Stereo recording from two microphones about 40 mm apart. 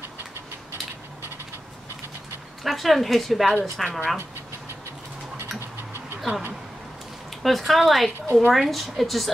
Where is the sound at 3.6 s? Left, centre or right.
Centre.